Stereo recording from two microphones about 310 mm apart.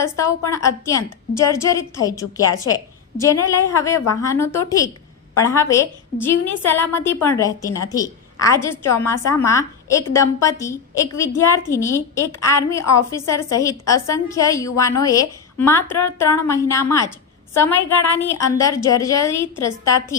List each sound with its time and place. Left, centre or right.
0.0 s a woman's voice: centre